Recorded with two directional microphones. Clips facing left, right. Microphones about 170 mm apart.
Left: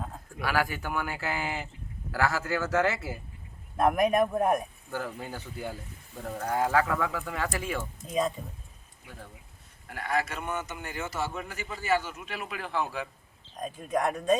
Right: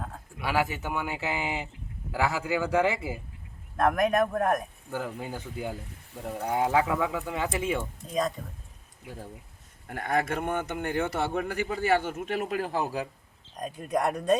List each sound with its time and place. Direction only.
0.4 s speech: 25° right (ahead or behind)
3.8 s speech: 5° left (ahead or behind)
4.9 s speech: 10° right (ahead or behind)
9.0 s speech: 35° right (ahead or behind)
9.8 s a man's voice: 50° right (ahead or behind)
13.6 s speech: 10° right (ahead or behind)